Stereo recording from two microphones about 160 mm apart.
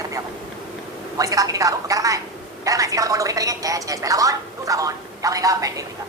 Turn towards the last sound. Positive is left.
turn(degrees=-20)  # may be behind; listen again after turning